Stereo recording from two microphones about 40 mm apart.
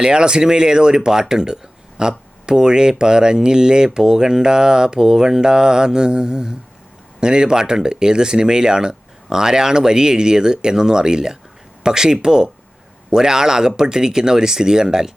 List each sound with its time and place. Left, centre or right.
0.0 s speech: right